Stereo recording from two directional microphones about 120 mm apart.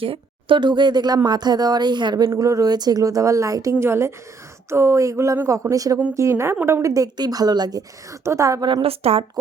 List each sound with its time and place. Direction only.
0.0 s speech: 45° right (ahead or behind); by 8.6 s 25° right (ahead or behind)
8.6 s speech: 40° right (ahead or behind)
8.9 s a woman's voice: 55° right (ahead or behind)